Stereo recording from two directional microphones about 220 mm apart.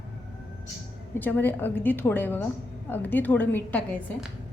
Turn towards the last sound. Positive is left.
turn(degrees=5)  # may be behind; listen again after turning